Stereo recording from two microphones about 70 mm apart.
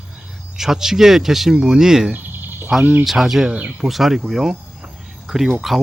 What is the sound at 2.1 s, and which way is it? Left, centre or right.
Cricket, right.